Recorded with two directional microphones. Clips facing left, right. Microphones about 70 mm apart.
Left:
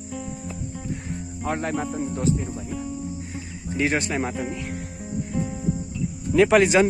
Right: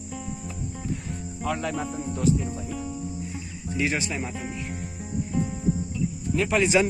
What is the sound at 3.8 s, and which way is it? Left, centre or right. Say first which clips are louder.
Speech: left 4 dB; left.